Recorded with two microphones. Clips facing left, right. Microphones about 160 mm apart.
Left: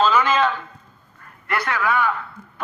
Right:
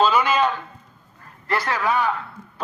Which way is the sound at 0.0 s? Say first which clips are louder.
Even; 15° right (ahead or behind).